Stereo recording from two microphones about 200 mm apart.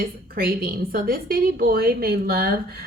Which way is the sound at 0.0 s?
50° right (ahead or behind).